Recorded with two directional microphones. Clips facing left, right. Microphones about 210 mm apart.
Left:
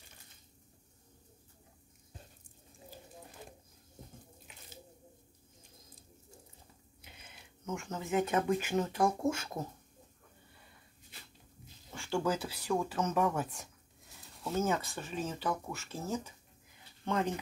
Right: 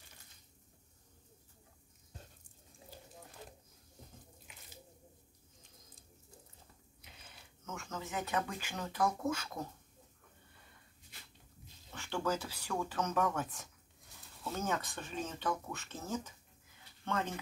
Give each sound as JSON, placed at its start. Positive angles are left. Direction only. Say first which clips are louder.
{"t": 7.6, "sound": "speech", "louder": "left 5 dB", "side_deg": 15}
{"t": 11.9, "sound": "speech", "louder": "left 3 dB", "side_deg": 10}